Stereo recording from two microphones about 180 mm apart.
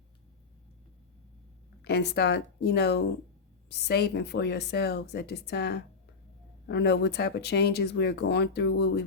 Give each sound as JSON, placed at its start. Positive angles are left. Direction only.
{"t": 1.8, "sound": "speech", "side_deg": 65}